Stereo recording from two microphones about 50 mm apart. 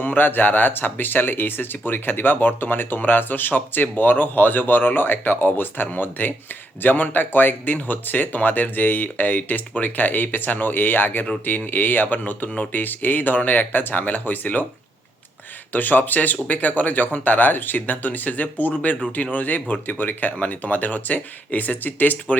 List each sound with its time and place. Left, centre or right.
0.0 s speech: left
15.7 s speech: left